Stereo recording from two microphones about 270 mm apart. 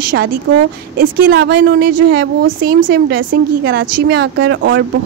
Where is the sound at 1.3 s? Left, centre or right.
Right.